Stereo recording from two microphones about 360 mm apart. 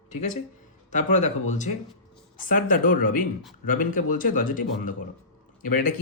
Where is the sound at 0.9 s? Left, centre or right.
Centre.